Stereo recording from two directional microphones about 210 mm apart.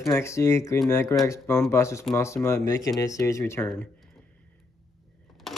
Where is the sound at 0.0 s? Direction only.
15° left (ahead or behind).